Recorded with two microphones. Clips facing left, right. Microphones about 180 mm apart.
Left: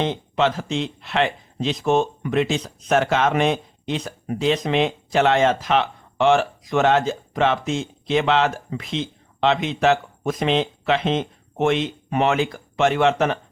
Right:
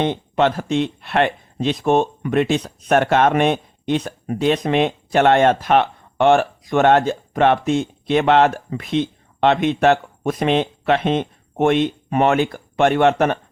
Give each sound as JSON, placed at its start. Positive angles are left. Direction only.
{"t": 0.0, "sound": "speech", "side_deg": -55}